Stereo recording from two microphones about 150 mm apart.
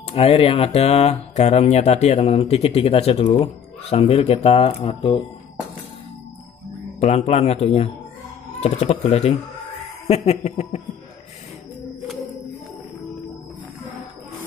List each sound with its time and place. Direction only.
0.1 s speech: 40° left (ahead or behind)
7.0 s speech: 45° left (ahead or behind)